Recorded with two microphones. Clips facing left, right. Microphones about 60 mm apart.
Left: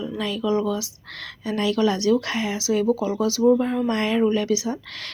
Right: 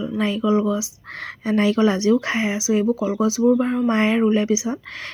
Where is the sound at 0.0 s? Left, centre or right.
Right.